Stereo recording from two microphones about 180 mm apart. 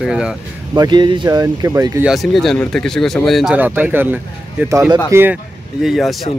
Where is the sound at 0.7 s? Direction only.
25° right (ahead or behind).